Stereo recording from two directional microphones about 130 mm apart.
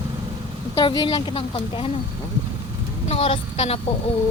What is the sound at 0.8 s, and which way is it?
A woman's voice, 40° left (ahead or behind).